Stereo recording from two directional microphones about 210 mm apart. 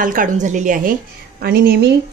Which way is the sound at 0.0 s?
40° right (ahead or behind).